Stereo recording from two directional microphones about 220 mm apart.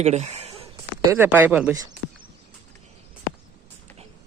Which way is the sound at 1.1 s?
10° right (ahead or behind).